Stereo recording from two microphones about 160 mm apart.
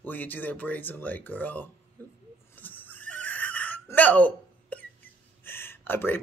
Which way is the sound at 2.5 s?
10° left (ahead or behind).